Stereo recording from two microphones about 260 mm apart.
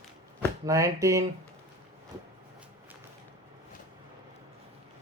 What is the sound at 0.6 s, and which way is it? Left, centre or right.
Speech, centre.